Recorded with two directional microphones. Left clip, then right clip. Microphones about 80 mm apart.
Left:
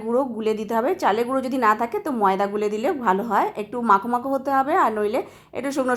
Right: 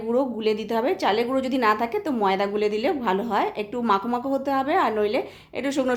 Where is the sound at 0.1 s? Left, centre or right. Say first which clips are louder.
Left 1 dB; left.